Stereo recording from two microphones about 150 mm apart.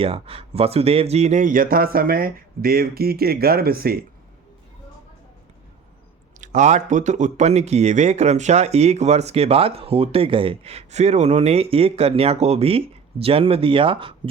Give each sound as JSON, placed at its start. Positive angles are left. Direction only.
{"t": 0.0, "sound": "speech", "side_deg": -40}
{"t": 6.4, "sound": "speech", "side_deg": -55}